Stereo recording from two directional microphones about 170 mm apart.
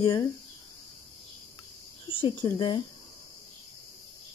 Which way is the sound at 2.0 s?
30° left (ahead or behind).